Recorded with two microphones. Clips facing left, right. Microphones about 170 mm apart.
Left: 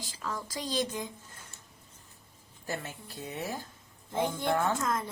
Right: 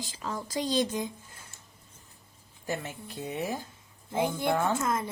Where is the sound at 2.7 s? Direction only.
15° right (ahead or behind).